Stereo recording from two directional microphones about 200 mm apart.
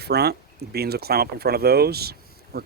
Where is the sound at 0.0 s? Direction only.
55° right (ahead or behind).